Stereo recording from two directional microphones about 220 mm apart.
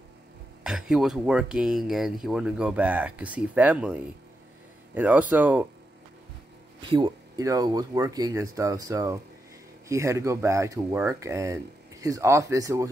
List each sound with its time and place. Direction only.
0.7 s speech: 5° right (ahead or behind)
6.9 s speech: 15° right (ahead or behind)